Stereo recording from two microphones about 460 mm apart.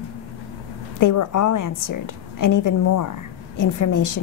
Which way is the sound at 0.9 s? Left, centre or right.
Left.